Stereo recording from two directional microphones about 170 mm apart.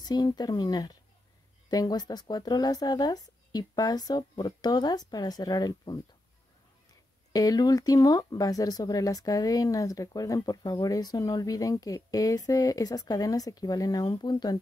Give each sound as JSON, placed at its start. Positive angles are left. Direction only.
{"t": 0.0, "sound": "speech", "side_deg": 25}
{"t": 7.3, "sound": "speech", "side_deg": 20}